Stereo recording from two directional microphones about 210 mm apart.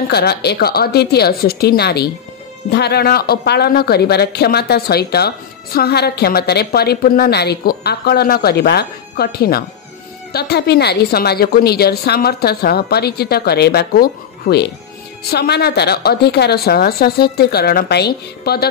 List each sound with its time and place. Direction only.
0.1 s speech: 50° left (ahead or behind)